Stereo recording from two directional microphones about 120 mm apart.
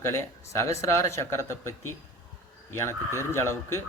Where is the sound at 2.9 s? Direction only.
20° left (ahead or behind).